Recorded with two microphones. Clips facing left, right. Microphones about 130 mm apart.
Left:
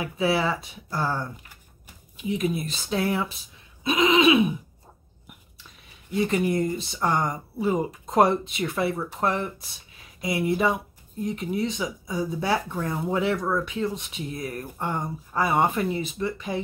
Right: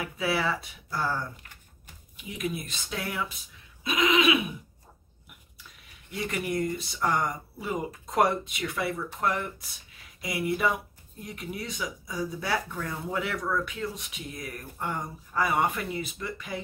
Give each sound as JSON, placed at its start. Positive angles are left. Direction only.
{"t": 0.0, "sound": "speech", "side_deg": 25}
{"t": 2.2, "sound": "speech", "side_deg": 30}
{"t": 6.1, "sound": "speech", "side_deg": 25}